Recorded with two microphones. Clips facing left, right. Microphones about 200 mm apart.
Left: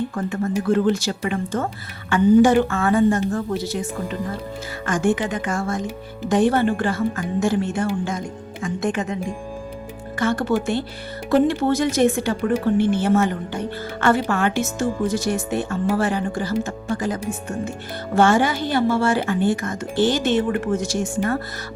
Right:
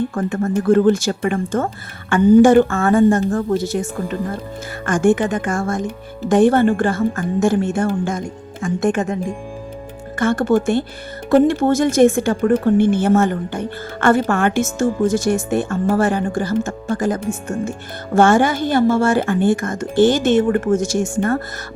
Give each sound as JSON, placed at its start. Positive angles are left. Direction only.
{"t": 0.1, "sound": "speech", "side_deg": -50}
{"t": 10.2, "sound": "speech", "side_deg": -50}